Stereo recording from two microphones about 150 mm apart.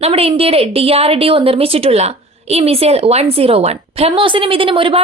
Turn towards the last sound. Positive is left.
turn(degrees=-35)  # may be behind; listen again after turning